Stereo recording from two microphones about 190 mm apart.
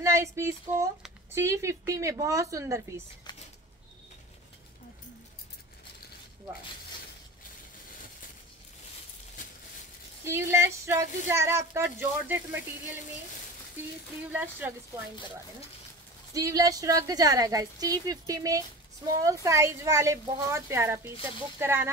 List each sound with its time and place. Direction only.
0.0 s speech: 15° right (ahead or behind)
3.3 s a sound: 20° left (ahead or behind)
10.2 s speech: 15° right (ahead or behind)
14.3 s speech: 10° right (ahead or behind)
16.3 s speech: 20° right (ahead or behind)